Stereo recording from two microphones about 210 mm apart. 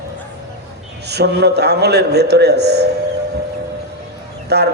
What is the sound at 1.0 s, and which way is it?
A man's voice, 50° right (ahead or behind).